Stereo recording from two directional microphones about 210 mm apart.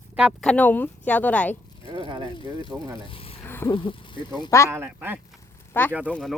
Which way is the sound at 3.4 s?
10° left (ahead or behind).